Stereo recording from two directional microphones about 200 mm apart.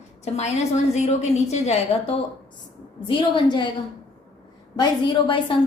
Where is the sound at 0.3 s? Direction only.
35° left (ahead or behind).